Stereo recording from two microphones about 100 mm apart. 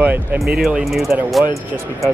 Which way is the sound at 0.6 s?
5° right (ahead or behind).